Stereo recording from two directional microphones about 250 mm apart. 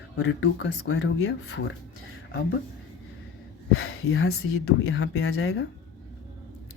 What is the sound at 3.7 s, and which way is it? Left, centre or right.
Speech, left.